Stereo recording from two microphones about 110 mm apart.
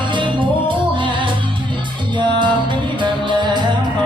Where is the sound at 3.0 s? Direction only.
45° right (ahead or behind).